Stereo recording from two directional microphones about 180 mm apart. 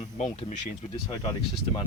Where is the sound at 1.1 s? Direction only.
25° left (ahead or behind).